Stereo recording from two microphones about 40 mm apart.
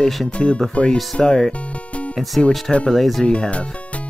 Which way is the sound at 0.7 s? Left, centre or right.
Left.